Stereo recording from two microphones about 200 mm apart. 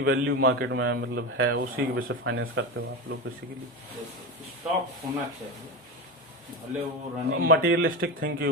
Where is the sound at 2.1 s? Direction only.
75° right (ahead or behind).